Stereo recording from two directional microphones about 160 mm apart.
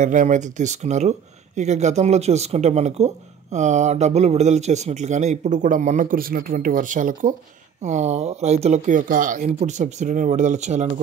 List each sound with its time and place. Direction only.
0.0 s a man's voice: 50° right (ahead or behind)
7.8 s a man's voice: 45° right (ahead or behind)